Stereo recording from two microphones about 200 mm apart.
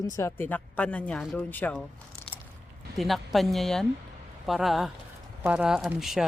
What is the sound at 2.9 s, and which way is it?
Speech, centre (ahead or behind).